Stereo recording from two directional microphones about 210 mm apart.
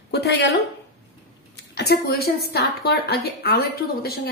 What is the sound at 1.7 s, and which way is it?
Speech, 50° left (ahead or behind).